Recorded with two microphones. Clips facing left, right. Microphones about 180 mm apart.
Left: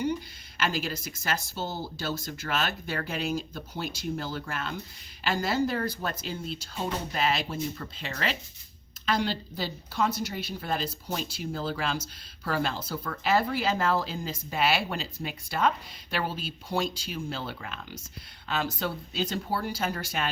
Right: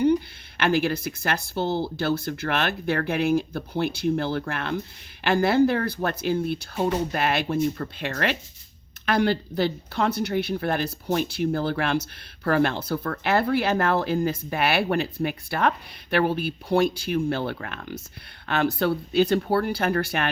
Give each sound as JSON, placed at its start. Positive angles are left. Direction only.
{"t": 0.0, "sound": "speech", "side_deg": -60}